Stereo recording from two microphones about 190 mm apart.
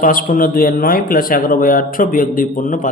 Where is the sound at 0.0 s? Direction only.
45° left (ahead or behind).